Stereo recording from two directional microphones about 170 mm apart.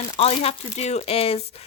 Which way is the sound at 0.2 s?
35° left (ahead or behind).